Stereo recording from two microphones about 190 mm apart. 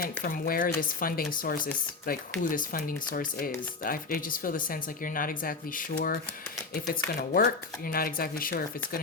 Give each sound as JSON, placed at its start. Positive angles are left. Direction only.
{"t": 0.0, "sound": "speech", "side_deg": 50}